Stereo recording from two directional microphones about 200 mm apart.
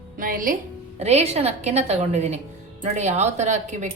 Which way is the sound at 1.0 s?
30° right (ahead or behind).